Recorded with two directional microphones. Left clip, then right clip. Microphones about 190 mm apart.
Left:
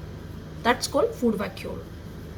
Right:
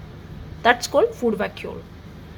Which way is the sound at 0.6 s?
55° right (ahead or behind).